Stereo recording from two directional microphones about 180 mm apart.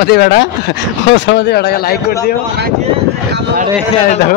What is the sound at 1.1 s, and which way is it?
Speech, 80° left.